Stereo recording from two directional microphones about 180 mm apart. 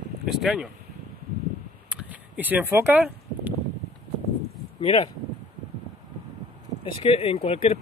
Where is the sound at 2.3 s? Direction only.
10° right (ahead or behind).